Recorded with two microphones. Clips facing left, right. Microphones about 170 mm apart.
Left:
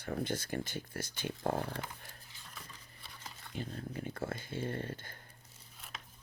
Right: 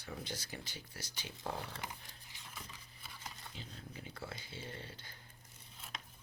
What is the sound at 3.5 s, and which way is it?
Speech, 50° left (ahead or behind).